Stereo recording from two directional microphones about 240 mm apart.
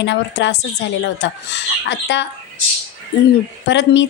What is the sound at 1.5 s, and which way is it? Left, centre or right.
Speech, left.